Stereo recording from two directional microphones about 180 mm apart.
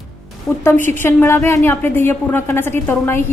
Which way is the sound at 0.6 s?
10° left (ahead or behind).